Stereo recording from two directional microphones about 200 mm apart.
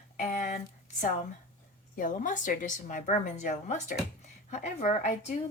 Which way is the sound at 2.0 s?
40° left (ahead or behind).